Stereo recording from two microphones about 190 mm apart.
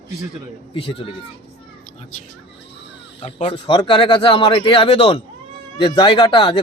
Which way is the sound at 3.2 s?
30° left (ahead or behind).